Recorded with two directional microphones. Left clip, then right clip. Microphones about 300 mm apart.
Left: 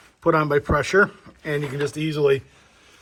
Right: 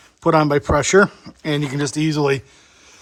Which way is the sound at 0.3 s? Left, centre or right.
Centre.